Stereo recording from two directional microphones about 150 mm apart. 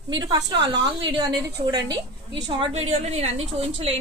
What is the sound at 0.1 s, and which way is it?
A woman's voice, 30° right (ahead or behind).